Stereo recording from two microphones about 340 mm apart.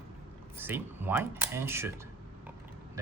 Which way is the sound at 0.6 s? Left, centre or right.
Centre.